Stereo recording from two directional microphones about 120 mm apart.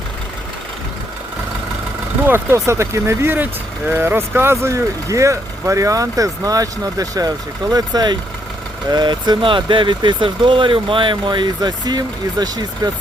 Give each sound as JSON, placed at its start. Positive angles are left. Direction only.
{"t": 2.2, "sound": "speech", "side_deg": -20}